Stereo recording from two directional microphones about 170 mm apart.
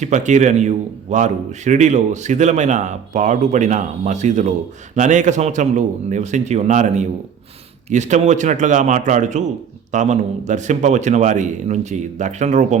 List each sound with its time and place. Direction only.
0.0 s a man's voice: 45° right (ahead or behind)